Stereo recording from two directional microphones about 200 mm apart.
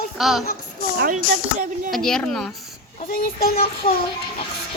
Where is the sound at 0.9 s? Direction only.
40° right (ahead or behind).